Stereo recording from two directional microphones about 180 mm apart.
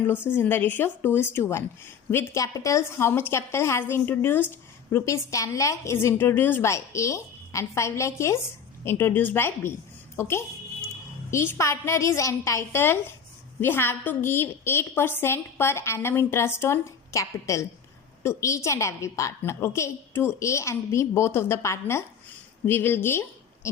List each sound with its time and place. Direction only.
0.3 s a woman's voice: 10° left (ahead or behind)